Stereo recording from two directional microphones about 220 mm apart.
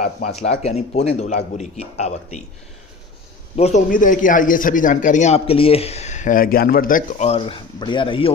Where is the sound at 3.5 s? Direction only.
30° left (ahead or behind).